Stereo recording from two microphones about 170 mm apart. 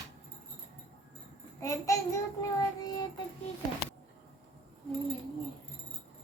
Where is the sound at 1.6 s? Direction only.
20° left (ahead or behind).